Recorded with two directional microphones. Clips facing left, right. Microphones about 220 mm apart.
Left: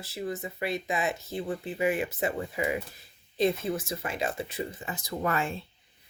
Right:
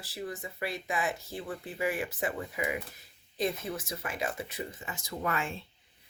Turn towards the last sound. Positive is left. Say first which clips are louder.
# left 4 dB
turn(degrees=40)  # may be behind; listen again after turning